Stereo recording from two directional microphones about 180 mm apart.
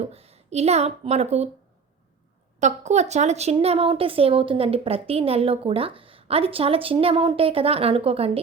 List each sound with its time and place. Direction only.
0.0 s speech: 35° right (ahead or behind)
2.6 s speech: 40° right (ahead or behind)